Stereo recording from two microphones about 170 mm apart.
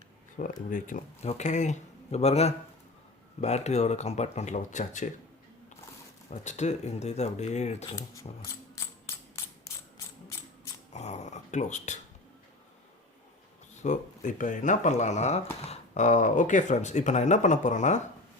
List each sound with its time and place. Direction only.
0.4 s speech: 50° left (ahead or behind)
6.3 s speech: 45° left (ahead or behind)
7.9 s a sound: 20° left (ahead or behind)
10.9 s dog: 40° left (ahead or behind)
13.7 s speech: 45° left (ahead or behind)